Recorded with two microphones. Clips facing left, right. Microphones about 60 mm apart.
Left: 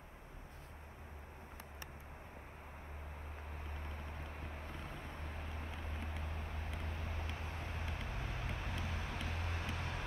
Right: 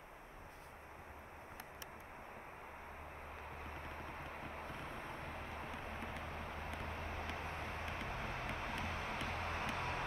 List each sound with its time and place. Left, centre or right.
3.7 s vehicle: right